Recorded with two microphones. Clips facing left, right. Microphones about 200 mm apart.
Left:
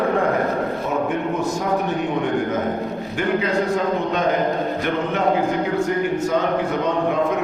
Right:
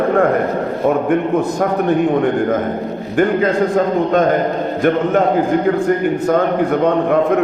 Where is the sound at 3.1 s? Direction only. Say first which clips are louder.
Right 7 dB; 50° right (ahead or behind).